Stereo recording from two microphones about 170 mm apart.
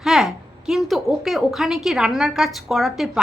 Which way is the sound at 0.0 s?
Centre (ahead or behind).